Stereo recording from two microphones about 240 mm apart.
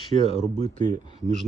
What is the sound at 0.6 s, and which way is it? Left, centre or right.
Speech, right.